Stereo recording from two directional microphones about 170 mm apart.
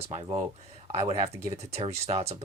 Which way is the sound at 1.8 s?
40° right (ahead or behind).